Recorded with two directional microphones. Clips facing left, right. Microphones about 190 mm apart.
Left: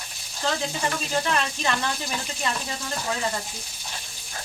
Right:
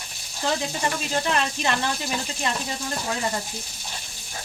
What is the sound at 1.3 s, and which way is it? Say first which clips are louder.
Speech: right 1 dB; 20° right (ahead or behind).